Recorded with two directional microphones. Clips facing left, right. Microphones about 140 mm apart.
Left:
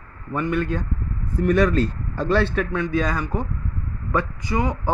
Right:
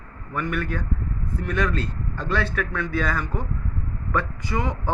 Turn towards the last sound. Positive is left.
turn(degrees=15)  # may be behind; listen again after turning